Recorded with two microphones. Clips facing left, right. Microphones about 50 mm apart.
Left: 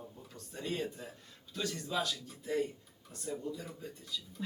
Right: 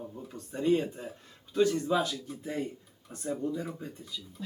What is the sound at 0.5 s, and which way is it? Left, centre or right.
Speech, right.